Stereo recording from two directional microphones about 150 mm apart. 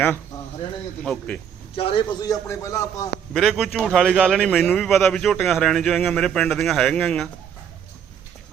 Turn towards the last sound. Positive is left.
turn(degrees=5)  # may be behind; listen again after turning